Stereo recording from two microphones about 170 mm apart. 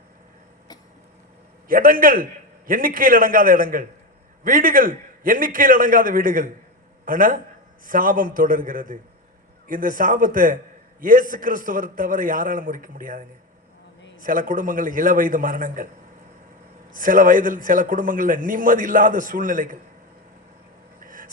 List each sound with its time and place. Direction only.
1.6 s a man's voice: 55° right (ahead or behind)
16.9 s a man's voice: 50° right (ahead or behind)
21.0 s a sound: 50° right (ahead or behind)